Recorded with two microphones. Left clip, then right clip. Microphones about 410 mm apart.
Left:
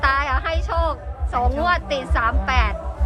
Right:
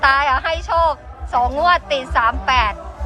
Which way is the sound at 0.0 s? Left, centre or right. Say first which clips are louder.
Right 5 dB; centre.